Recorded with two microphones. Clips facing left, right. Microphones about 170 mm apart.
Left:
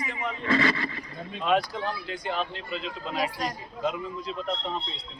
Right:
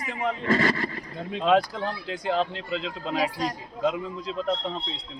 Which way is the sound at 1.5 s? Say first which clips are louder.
Right 3 dB; 90° right.